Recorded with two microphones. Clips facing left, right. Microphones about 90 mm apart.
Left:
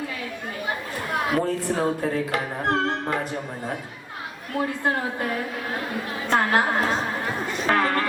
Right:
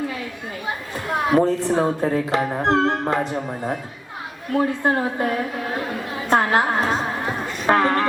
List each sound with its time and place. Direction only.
1.3 s speech: 20° right (ahead or behind)
4.5 s speech: 25° right (ahead or behind)
6.3 s a sound: 20° right (ahead or behind)